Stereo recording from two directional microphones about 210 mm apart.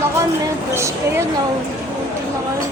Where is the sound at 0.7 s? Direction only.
10° right (ahead or behind).